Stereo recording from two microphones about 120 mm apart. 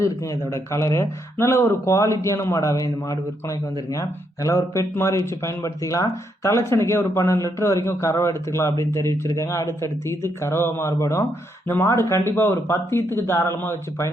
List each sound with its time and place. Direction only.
0.5 s speech: 25° left (ahead or behind)
4.4 s speech: 25° left (ahead or behind)